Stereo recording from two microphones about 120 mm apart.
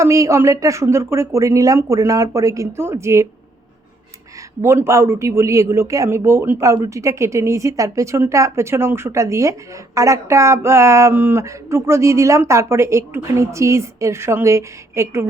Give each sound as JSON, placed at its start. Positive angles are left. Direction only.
{"t": 0.0, "sound": "a man's voice", "side_deg": -25}
{"t": 4.6, "sound": "a man's voice", "side_deg": -20}